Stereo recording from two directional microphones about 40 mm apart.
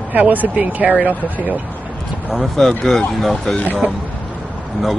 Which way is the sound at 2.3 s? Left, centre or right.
Centre.